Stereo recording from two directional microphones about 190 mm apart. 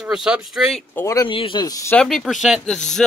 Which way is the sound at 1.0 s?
20° left (ahead or behind).